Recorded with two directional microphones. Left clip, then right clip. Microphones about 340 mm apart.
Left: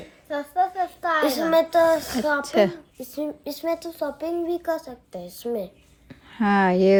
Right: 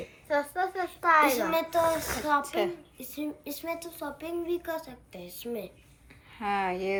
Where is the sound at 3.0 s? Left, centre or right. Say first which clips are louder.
Left 7 dB; centre.